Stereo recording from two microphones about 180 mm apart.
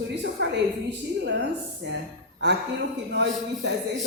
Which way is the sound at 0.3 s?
70° right (ahead or behind).